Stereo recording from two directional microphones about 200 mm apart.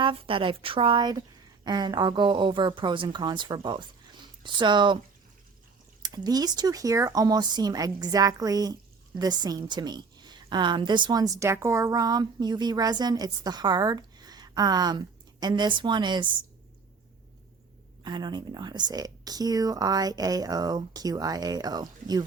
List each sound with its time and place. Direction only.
0.0 s a woman's voice: 25° right (ahead or behind)
6.0 s a woman's voice: 20° right (ahead or behind)
18.0 s a woman's voice: 20° right (ahead or behind)